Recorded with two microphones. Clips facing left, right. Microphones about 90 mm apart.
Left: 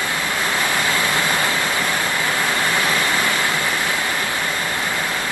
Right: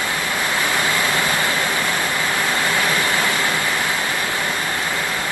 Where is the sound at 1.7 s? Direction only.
20° right (ahead or behind).